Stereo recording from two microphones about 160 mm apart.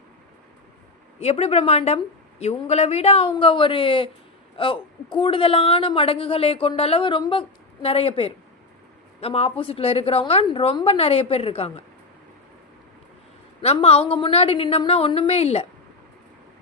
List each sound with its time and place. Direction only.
1.2 s a woman's voice: 40° left (ahead or behind)
13.6 s a woman's voice: 40° left (ahead or behind)